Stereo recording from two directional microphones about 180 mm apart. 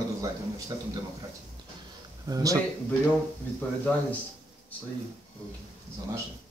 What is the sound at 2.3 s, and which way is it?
Speech, 20° right (ahead or behind).